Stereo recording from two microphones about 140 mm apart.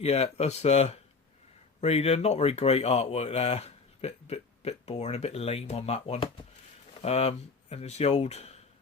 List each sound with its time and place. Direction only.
0.0 s speech: 50° left (ahead or behind)